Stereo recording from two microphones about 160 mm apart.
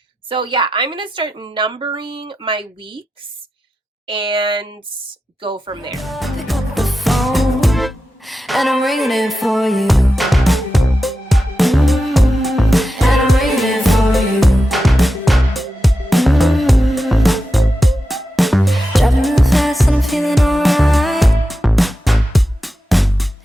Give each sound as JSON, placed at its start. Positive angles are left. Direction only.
{"t": 0.3, "sound": "a woman's voice", "side_deg": -30}
{"t": 4.0, "sound": "a woman's voice", "side_deg": -30}
{"t": 5.9, "sound": "music", "side_deg": 0}